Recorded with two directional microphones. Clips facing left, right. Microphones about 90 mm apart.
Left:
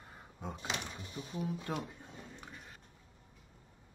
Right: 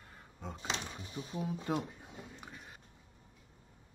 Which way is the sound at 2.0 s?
10° right (ahead or behind).